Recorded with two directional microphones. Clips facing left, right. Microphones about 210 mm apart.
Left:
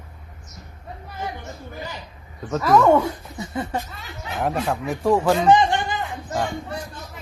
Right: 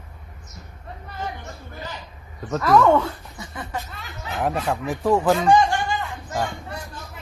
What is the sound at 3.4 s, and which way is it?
Speech, 25° left (ahead or behind).